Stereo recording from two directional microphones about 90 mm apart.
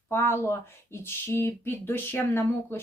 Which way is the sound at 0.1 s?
25° left (ahead or behind).